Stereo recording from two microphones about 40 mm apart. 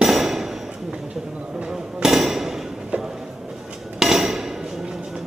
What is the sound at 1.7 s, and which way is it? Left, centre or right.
Hammer, centre.